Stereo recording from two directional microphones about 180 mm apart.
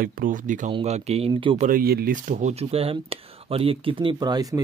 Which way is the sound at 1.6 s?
55° right (ahead or behind).